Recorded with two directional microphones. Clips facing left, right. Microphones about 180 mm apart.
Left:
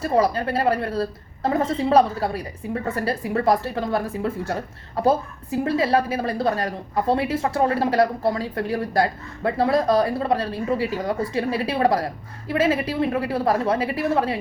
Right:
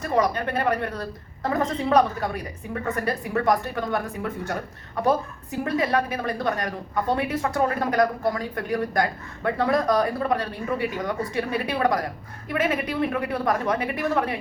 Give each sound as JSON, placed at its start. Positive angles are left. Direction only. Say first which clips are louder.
{"t": 0.0, "sound": "a woman's voice", "louder": "left 3 dB", "side_deg": 30}